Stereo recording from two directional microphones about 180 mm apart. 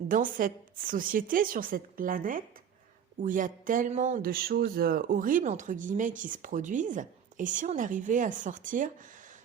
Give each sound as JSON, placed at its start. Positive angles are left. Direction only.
{"t": 0.1, "sound": "speech", "side_deg": -50}